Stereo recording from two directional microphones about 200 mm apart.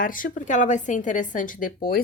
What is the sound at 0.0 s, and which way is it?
A woman's voice, 45° left (ahead or behind).